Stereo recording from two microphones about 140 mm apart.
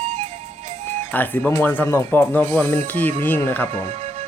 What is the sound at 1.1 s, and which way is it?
Music, 15° left (ahead or behind).